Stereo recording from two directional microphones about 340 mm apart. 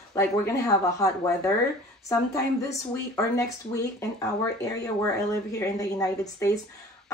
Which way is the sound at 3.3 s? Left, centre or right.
Centre.